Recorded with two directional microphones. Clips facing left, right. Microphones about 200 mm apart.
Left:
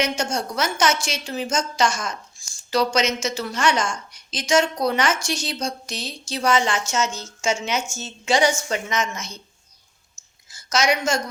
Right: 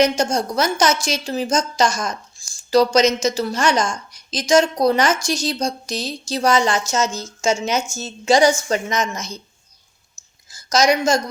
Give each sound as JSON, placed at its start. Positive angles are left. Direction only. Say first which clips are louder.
{"t": 0.0, "sound": "a woman's voice", "louder": "right 6 dB", "side_deg": -35}
{"t": 10.5, "sound": "a woman's voice", "louder": "right 5 dB", "side_deg": -35}